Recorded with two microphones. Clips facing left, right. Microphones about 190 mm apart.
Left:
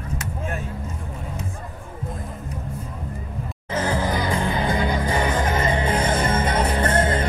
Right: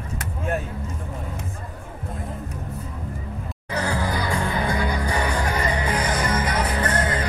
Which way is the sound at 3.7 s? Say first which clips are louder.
Left 2 dB; 20° left (ahead or behind).